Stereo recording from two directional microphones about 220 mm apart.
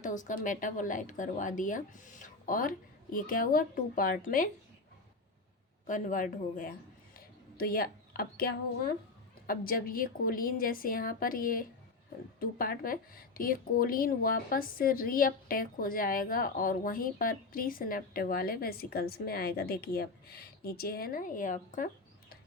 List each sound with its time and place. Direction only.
0.0 s a woman's voice: 35° left (ahead or behind)
5.9 s a woman's voice: 35° left (ahead or behind)
7.2 s a sound: 45° left (ahead or behind)
9.5 s a woman's voice: 40° left (ahead or behind)